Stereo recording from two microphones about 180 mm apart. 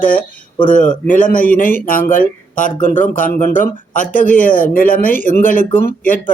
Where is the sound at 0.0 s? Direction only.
50° left (ahead or behind).